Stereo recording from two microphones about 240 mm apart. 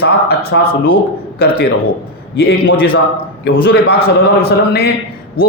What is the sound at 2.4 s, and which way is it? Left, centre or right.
A man's voice, left.